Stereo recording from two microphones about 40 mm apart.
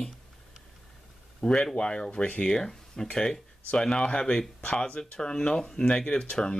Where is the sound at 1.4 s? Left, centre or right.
Left.